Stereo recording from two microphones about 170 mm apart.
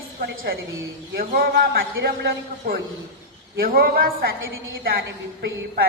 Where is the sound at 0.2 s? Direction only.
65° right (ahead or behind).